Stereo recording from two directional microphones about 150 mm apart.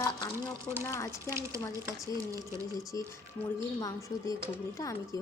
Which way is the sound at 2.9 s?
20° left (ahead or behind).